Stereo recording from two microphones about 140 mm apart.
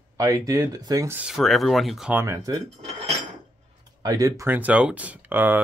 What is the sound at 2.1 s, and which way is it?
Speech, 20° right (ahead or behind).